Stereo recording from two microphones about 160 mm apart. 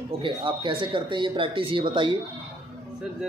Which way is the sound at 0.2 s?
35° right (ahead or behind).